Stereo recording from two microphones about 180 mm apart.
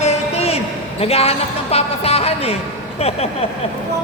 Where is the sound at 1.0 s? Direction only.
35° left (ahead or behind).